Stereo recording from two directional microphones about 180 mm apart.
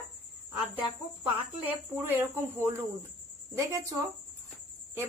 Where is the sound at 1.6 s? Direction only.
10° right (ahead or behind).